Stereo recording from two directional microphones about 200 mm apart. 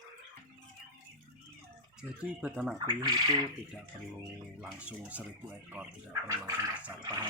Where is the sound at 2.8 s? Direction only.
20° right (ahead or behind).